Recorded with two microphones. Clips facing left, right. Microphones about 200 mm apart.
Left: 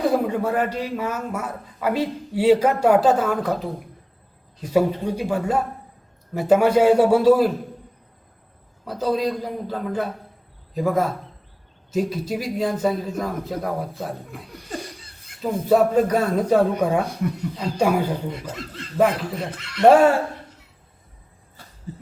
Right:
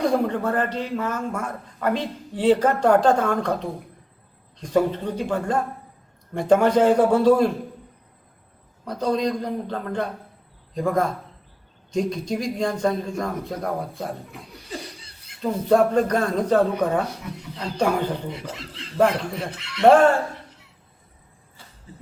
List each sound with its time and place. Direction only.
0.0 s a man's voice: 5° left (ahead or behind)
8.8 s a man's voice: 5° left (ahead or behind)
15.4 s a man's voice: 5° left (ahead or behind)
18.3 s speech: 50° left (ahead or behind)
18.9 s a man's voice: 5° left (ahead or behind)
19.5 s speech: 50° left (ahead or behind)
19.8 s a man's voice: 10° left (ahead or behind)